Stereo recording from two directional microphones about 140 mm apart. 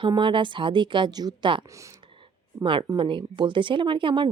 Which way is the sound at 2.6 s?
35° right (ahead or behind).